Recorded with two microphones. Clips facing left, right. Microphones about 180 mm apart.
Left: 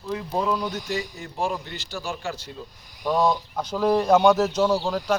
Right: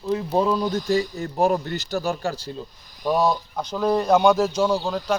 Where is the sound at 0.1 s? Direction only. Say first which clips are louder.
Right 4 dB; 30° right (ahead or behind).